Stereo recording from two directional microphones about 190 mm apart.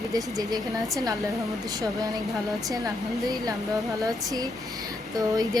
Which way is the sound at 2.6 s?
20° right (ahead or behind).